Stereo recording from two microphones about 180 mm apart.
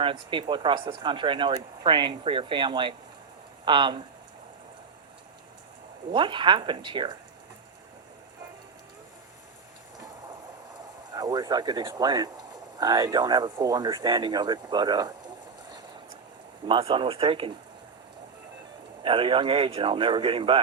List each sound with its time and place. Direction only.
0.0 s speech: 30° right (ahead or behind)
6.1 s speech: 25° right (ahead or behind)
11.1 s speech: 20° right (ahead or behind)
16.6 s speech: 30° right (ahead or behind)
19.0 s speech: 30° right (ahead or behind)